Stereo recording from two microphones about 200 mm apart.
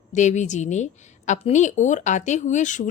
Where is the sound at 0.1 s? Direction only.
35° left (ahead or behind).